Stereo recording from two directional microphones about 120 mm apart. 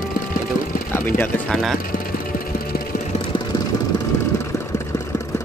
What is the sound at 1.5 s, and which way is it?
Speech, centre (ahead or behind).